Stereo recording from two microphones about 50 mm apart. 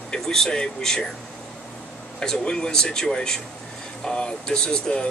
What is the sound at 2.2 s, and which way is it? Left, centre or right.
Speech, centre.